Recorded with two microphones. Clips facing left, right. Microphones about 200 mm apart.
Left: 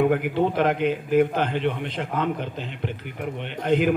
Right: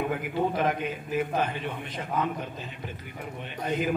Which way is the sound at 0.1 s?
65° left (ahead or behind).